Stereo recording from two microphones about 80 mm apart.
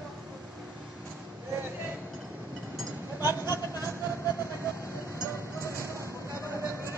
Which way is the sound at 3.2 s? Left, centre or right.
Right.